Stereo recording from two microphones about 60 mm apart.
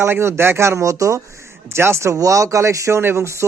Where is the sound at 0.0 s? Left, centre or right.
Right.